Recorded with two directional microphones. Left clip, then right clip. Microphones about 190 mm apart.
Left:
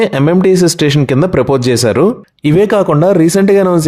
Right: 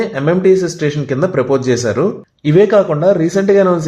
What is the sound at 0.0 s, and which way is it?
Speech, 45° left (ahead or behind).